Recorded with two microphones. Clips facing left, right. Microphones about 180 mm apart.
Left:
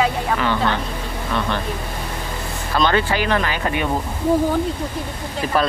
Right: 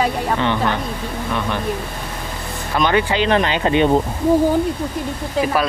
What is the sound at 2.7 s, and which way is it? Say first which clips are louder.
Speech: right 1 dB; 15° right (ahead or behind).